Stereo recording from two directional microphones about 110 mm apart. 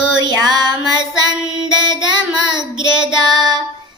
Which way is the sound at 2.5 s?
40° right (ahead or behind).